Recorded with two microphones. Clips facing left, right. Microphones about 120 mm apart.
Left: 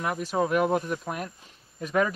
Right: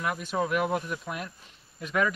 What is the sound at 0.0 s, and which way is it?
Speech, 35° left (ahead or behind).